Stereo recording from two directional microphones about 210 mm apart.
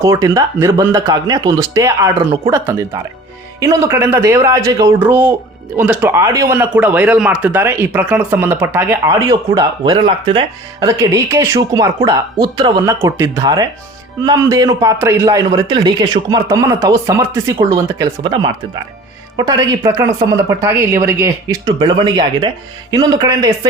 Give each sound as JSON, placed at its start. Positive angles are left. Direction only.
{"t": 0.0, "sound": "speech", "side_deg": -15}